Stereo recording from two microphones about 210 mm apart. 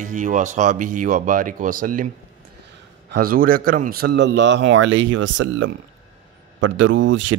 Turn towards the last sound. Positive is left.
turn(degrees=-60)  # may be behind; listen again after turning